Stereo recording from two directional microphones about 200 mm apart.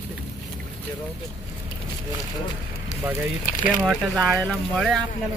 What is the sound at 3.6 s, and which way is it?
Speech, centre (ahead or behind).